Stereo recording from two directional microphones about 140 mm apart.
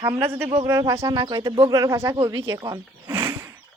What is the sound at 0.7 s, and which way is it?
A woman's voice, 20° right (ahead or behind).